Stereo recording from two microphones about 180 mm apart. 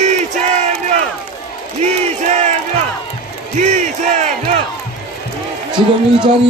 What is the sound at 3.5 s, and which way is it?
A man's voice, 40° right (ahead or behind).